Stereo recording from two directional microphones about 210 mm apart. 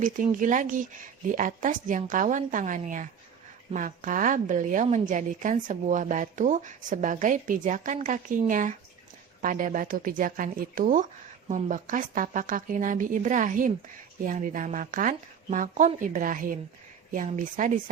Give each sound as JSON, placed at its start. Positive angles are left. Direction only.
{"t": 0.0, "sound": "a woman's voice", "side_deg": -40}